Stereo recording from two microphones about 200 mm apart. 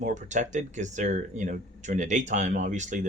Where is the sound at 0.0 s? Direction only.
35° right (ahead or behind).